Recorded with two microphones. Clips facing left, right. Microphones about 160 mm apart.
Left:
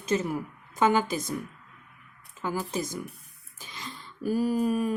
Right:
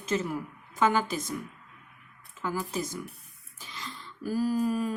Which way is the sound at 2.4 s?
25° left (ahead or behind).